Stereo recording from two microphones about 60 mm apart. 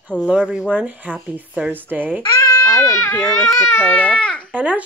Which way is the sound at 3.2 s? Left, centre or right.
Centre.